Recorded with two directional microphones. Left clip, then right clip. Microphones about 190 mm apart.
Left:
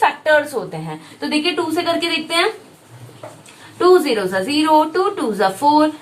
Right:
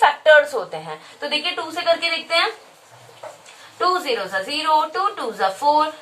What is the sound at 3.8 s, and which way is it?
Speech, centre (ahead or behind).